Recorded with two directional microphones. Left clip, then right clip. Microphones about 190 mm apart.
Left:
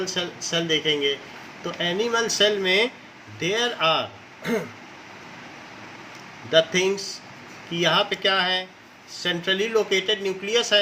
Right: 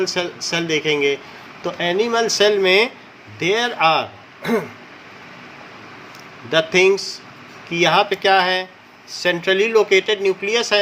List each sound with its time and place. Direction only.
0.1 s speech: 50° right (ahead or behind)
6.5 s speech: 50° right (ahead or behind)